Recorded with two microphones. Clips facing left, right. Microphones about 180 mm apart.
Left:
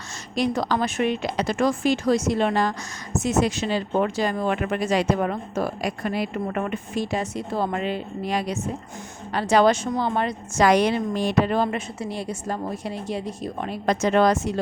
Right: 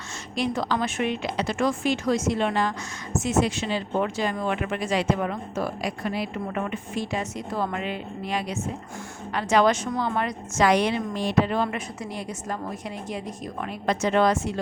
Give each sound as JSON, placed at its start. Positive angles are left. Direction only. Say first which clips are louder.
{"t": 0.3, "sound": "speech", "louder": "left 3 dB", "side_deg": 40}
{"t": 10.6, "sound": "speech", "louder": "left 3 dB", "side_deg": 40}